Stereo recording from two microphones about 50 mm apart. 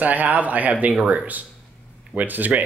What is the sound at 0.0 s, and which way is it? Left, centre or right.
Speech, right.